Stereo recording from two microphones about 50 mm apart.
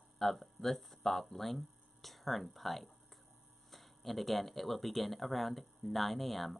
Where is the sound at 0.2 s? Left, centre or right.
Centre.